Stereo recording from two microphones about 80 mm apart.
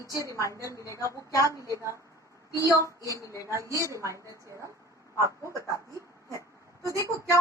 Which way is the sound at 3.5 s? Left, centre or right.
Right.